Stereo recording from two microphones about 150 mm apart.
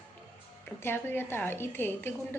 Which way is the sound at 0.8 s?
15° left (ahead or behind).